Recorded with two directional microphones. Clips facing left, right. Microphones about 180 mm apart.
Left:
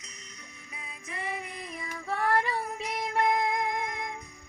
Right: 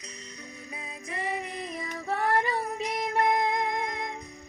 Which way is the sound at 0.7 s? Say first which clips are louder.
Right 3 dB; 35° right (ahead or behind).